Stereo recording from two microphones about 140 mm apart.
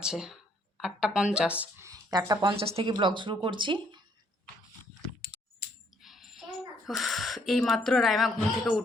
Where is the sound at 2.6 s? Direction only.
45° right (ahead or behind).